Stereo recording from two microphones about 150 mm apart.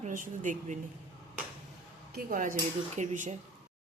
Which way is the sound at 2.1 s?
65° right (ahead or behind).